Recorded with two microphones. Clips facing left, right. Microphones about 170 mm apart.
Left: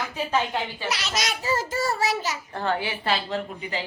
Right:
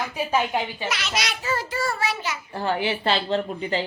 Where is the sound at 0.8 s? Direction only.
35° left (ahead or behind).